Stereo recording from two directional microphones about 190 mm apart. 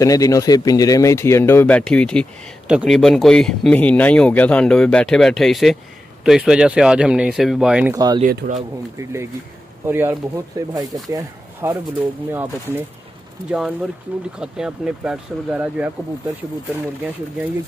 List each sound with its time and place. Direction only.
0.0 s speech: 20° left (ahead or behind); by 8.2 s 20° right (ahead or behind)
8.2 s speech: 45° right (ahead or behind)
9.8 s speech: 10° right (ahead or behind)